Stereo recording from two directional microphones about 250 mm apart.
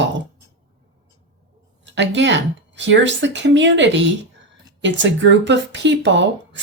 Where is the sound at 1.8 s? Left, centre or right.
Right.